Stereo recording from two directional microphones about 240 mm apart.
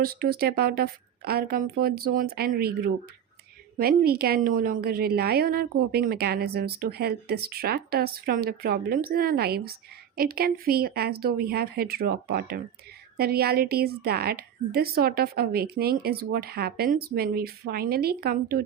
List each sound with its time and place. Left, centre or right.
0.0 s a woman's voice: right